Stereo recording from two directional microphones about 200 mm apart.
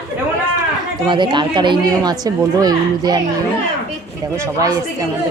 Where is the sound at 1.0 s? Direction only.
25° right (ahead or behind).